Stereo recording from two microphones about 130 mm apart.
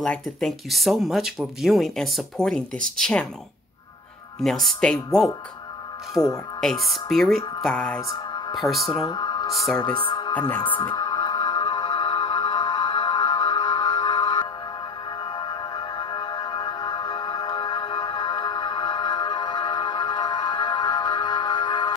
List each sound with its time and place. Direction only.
0.0 s speech: 5° left (ahead or behind)
4.4 s speech: centre (ahead or behind)
6.1 s speech: 30° left (ahead or behind)
6.6 s speech: centre (ahead or behind)
8.9 s speech: 35° left (ahead or behind)
9.5 s speech: centre (ahead or behind)
9.8 s speech: 40° left (ahead or behind)
10.6 s music: 40° left (ahead or behind)